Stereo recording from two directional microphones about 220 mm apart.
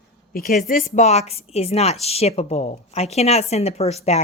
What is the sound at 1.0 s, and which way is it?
A woman's voice, 30° left (ahead or behind).